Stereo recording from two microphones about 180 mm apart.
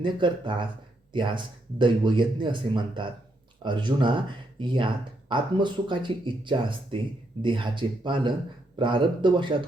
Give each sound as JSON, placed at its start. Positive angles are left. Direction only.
{"t": 0.0, "sound": "speech", "side_deg": -25}